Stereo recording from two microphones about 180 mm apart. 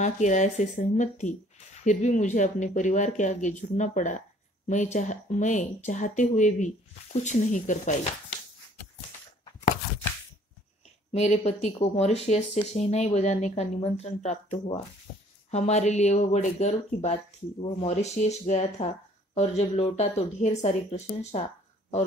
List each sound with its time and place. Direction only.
0.0 s a woman's voice: 40° left (ahead or behind)
11.1 s a woman's voice: 35° left (ahead or behind)
15.1 s a sound: 45° left (ahead or behind)
15.5 s a woman's voice: 40° left (ahead or behind)